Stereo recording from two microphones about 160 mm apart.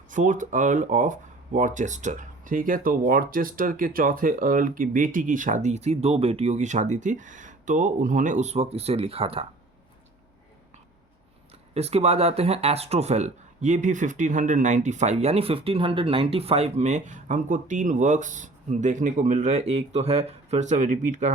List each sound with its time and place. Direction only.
0.1 s speech: 55° right (ahead or behind); by 9.5 s 35° right (ahead or behind)
11.7 s speech: 40° right (ahead or behind)